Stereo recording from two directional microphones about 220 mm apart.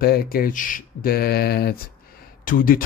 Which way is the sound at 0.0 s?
45° left (ahead or behind).